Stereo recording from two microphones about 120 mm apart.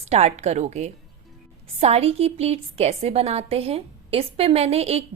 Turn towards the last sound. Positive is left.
turn(degrees=-60)  # may be behind; listen again after turning